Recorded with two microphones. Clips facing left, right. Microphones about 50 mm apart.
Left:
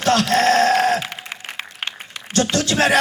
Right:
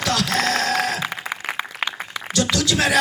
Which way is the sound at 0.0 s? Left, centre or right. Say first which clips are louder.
Left 5 dB; left.